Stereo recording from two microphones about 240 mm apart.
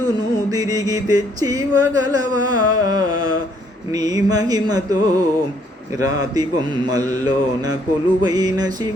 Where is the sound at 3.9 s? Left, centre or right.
Centre.